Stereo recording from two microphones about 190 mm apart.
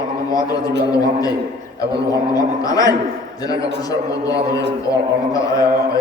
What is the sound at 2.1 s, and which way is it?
A man's voice, 20° left (ahead or behind).